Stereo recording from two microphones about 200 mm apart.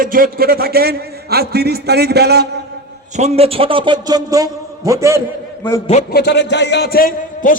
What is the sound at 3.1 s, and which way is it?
A man's voice, 30° right (ahead or behind).